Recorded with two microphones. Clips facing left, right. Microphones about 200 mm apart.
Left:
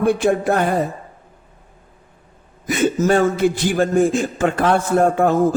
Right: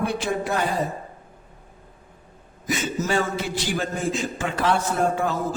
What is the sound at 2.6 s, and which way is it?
A man's voice, 55° left (ahead or behind).